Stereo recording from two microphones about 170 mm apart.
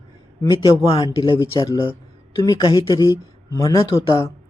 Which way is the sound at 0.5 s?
30° left (ahead or behind).